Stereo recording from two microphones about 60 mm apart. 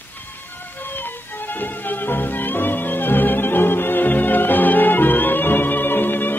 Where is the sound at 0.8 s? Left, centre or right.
Left.